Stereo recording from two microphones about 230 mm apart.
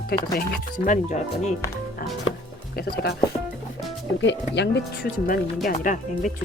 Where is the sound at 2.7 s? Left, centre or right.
Left.